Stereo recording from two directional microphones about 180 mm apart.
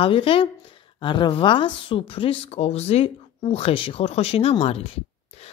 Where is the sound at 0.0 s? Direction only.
30° left (ahead or behind).